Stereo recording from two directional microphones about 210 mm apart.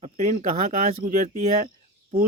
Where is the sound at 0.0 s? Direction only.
35° right (ahead or behind).